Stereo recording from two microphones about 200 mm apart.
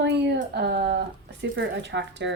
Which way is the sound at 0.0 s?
60° right (ahead or behind).